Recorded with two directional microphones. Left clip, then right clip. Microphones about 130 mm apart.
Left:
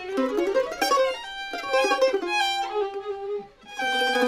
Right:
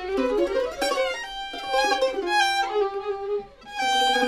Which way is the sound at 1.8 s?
45° left (ahead or behind).